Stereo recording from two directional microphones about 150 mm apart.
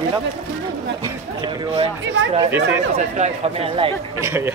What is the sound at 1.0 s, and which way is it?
Speech, 25° right (ahead or behind).